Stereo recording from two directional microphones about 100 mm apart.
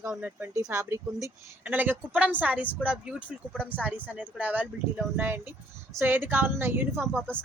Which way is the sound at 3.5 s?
10° left (ahead or behind).